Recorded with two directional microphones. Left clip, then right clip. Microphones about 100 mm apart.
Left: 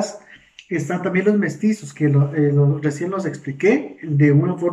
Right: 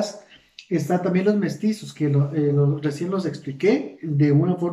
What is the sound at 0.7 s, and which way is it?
Speech, 20° right (ahead or behind).